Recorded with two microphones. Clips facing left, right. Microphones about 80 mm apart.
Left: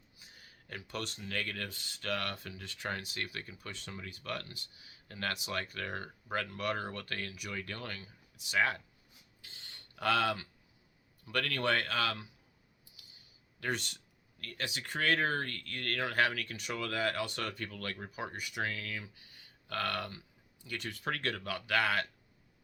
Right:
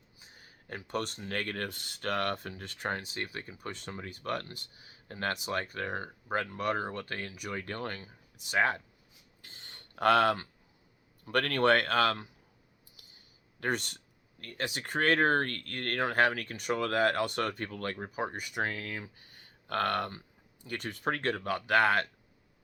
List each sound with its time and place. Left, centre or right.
0.2 s speech: right
2.9 s speech: right
3.7 s speech: right
9.4 s a sound: right
11.3 s speech: right
13.0 s a sound: right
13.6 s speech: right